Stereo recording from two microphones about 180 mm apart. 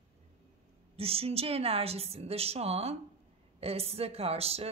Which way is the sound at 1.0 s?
30° right (ahead or behind).